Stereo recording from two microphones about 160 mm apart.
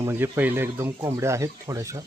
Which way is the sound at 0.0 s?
15° right (ahead or behind).